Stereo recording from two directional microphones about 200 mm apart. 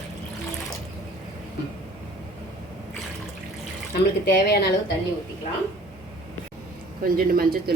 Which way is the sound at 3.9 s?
55° left (ahead or behind).